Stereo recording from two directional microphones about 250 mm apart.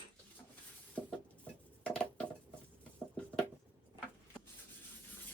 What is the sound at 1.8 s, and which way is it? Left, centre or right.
Dishes, centre.